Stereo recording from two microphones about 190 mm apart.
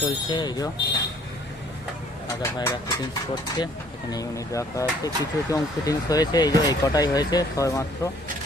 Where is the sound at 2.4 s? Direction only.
15° left (ahead or behind).